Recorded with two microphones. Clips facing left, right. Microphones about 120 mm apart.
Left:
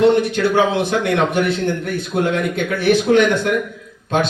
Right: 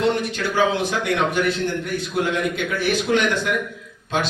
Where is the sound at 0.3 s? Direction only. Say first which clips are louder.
Left 5 dB; 60° left (ahead or behind).